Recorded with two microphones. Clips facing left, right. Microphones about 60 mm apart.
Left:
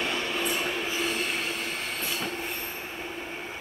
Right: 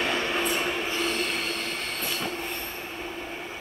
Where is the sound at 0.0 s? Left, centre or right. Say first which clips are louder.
Right 3 dB; right.